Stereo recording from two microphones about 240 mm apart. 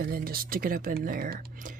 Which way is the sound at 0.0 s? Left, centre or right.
Right.